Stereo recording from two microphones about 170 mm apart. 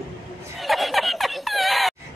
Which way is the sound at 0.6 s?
Centre (ahead or behind).